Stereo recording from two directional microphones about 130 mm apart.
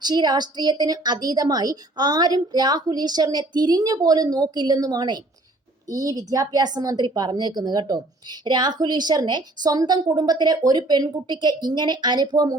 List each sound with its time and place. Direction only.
0.0 s speech: 35° right (ahead or behind)